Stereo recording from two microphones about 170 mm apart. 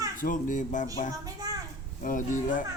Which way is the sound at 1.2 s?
20° right (ahead or behind).